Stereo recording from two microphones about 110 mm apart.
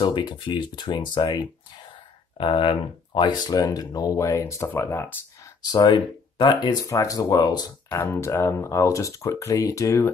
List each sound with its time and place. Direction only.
0.0 s speech: 45° left (ahead or behind)
3.4 s speech: 35° left (ahead or behind); by 5.1 s 20° left (ahead or behind)
5.7 s speech: 40° left (ahead or behind)
7.9 s speech: 25° left (ahead or behind)